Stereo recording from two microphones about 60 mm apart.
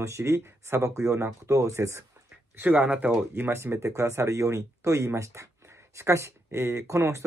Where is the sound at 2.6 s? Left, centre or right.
Right.